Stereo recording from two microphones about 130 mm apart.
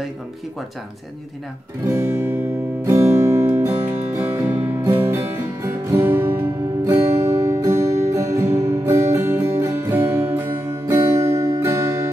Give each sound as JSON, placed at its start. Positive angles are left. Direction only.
{"t": 1.9, "sound": "music", "side_deg": -20}
{"t": 7.4, "sound": "guitar", "side_deg": -20}
{"t": 9.1, "sound": "music", "side_deg": -20}